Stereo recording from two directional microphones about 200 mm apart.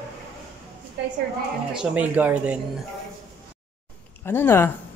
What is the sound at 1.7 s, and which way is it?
Speech, 5° right (ahead or behind).